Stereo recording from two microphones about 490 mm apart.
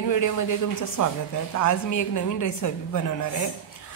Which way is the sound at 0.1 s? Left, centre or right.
Left.